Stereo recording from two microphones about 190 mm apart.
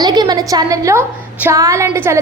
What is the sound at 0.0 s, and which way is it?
A woman's voice, 20° right (ahead or behind).